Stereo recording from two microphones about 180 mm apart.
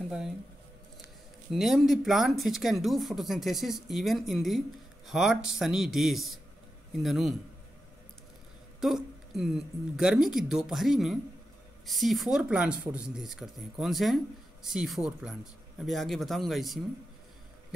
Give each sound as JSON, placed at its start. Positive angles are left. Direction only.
{"t": 1.5, "sound": "speech", "side_deg": 0}
{"t": 8.8, "sound": "speech", "side_deg": 0}